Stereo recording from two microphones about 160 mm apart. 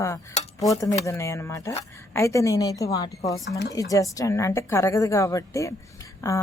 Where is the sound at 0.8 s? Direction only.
20° left (ahead or behind).